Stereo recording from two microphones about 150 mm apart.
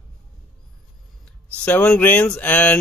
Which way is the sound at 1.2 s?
10° left (ahead or behind).